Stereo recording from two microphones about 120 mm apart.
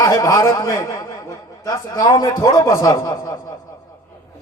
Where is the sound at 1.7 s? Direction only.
30° left (ahead or behind).